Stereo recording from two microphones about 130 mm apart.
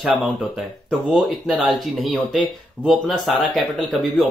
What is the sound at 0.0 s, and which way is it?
Speech, centre (ahead or behind).